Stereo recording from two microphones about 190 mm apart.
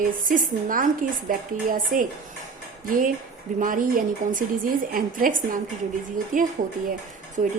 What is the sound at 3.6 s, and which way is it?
A woman's voice, 45° right (ahead or behind).